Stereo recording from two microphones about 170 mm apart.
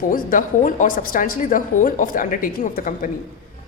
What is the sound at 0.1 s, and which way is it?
A woman's voice, 50° left (ahead or behind).